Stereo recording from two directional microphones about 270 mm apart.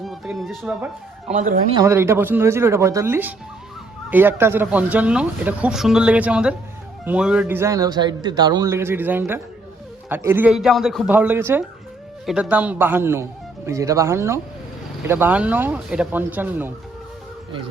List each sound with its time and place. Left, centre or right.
0.0 s music: centre
1.3 s speech: right
1.7 s a man's voice: centre